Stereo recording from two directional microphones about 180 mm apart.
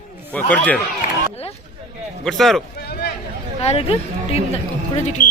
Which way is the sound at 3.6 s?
35° left (ahead or behind).